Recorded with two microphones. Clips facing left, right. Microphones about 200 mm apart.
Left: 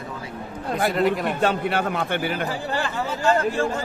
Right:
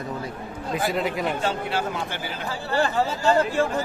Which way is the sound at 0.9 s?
Centre (ahead or behind).